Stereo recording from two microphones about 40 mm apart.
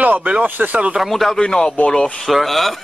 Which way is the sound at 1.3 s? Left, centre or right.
Centre.